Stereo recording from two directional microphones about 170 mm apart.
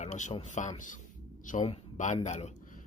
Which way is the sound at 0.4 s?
45° left (ahead or behind).